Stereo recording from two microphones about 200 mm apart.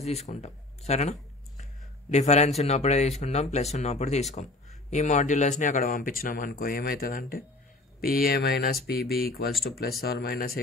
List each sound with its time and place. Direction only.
0.0 s speech: 35° left (ahead or behind); by 10.6 s 50° left (ahead or behind)